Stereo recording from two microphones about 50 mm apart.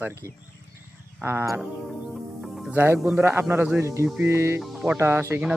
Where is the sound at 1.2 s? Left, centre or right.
Right.